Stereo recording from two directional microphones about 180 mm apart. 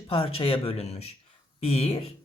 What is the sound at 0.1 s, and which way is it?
Speech, 30° left (ahead or behind).